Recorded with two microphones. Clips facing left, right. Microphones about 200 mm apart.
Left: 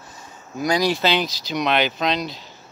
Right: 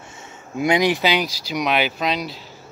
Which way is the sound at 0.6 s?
20° right (ahead or behind).